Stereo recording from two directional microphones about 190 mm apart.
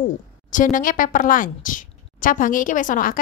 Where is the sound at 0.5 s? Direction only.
45° left (ahead or behind).